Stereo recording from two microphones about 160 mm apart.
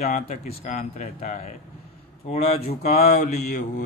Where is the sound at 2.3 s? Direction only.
40° left (ahead or behind).